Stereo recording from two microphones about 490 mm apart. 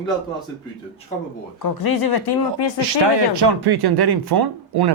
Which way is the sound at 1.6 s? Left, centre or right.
Left.